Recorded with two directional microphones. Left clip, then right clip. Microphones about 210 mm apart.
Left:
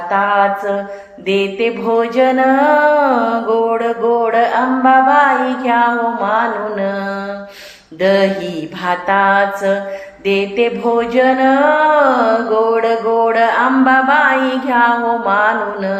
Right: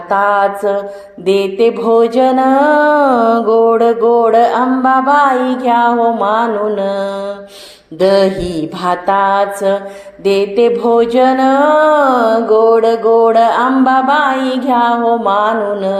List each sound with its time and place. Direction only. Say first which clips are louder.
0.1 s mantra: right 2 dB; 45° right (ahead or behind)
4.4 s mantra: right 3 dB; 15° right (ahead or behind)
4.9 s mantra: left 1 dB; 50° right (ahead or behind)
12.8 s mantra: right 4 dB; 15° right (ahead or behind)
13.2 s a sound: right 3 dB; 40° right (ahead or behind)
14.1 s mantra: even; 45° right (ahead or behind)
14.7 s a sound: right 2 dB; 40° right (ahead or behind)